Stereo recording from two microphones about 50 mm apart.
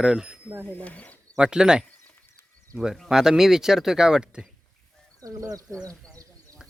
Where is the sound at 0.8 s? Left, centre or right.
Left.